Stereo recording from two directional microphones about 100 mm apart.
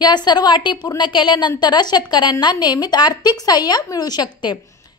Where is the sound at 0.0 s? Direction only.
45° left (ahead or behind).